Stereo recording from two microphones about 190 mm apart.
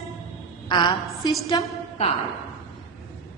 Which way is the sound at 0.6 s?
25° left (ahead or behind).